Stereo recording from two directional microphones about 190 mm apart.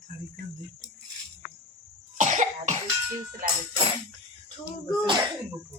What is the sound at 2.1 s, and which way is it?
Cough, 40° right (ahead or behind).